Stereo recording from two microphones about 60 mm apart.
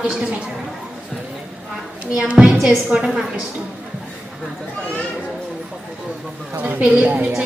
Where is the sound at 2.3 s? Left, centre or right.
Centre.